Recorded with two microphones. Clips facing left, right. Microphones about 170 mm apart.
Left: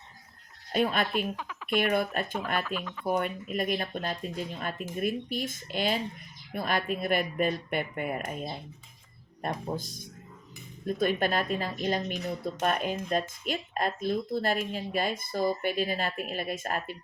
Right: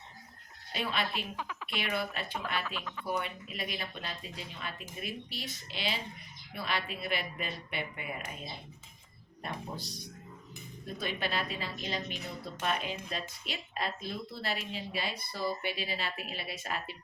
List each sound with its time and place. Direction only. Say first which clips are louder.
0.7 s speech: left 8 dB; 50° left (ahead or behind)
1.4 s a sound: left 8 dB; centre (ahead or behind)
1.8 s speech: left 7 dB; 50° left (ahead or behind)
2.6 s speech: left 5 dB; centre (ahead or behind)
3.1 s speech: left 7 dB; 50° left (ahead or behind)
9.4 s speech: left 7 dB; 45° left (ahead or behind)